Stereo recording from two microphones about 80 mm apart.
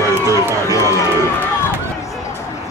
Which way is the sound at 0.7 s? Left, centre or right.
Left.